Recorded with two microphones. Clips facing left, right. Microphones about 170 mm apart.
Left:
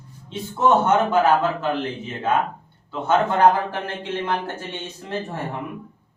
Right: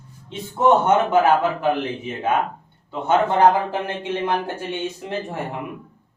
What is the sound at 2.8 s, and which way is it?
Speech, 20° right (ahead or behind).